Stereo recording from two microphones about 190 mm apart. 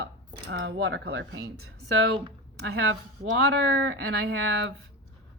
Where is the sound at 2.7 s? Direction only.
80° right.